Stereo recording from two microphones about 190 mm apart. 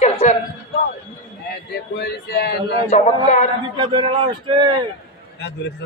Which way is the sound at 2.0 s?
60° left (ahead or behind).